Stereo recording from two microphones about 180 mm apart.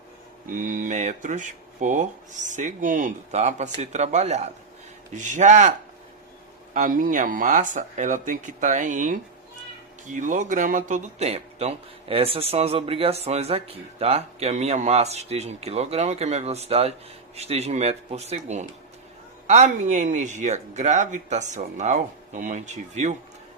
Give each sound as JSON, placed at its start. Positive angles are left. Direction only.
{"t": 0.4, "sound": "speech", "side_deg": -45}
{"t": 6.7, "sound": "speech", "side_deg": -50}